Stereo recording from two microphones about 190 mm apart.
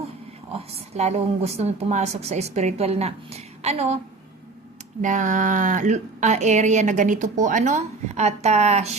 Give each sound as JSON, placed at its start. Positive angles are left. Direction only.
{"t": 0.5, "sound": "a woman's voice", "side_deg": -35}
{"t": 5.0, "sound": "a woman's voice", "side_deg": -40}